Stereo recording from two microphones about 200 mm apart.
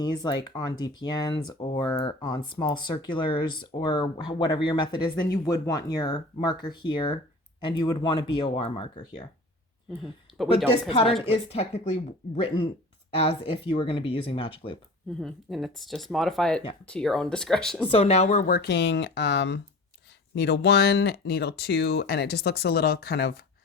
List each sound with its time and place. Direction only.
0.0 s speech: 20° left (ahead or behind)
10.0 s speech: centre (ahead or behind)
10.8 s speech: 25° left (ahead or behind)
15.2 s speech: centre (ahead or behind)
17.8 s speech: 30° left (ahead or behind); by 23.3 s 55° left (ahead or behind)